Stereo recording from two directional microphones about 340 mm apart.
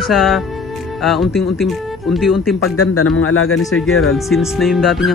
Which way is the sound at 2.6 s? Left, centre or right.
Left.